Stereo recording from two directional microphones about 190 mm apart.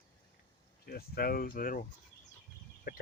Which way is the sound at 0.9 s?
55° left (ahead or behind).